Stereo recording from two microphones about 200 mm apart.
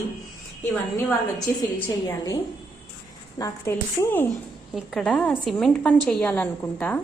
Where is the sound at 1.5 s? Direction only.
10° left (ahead or behind).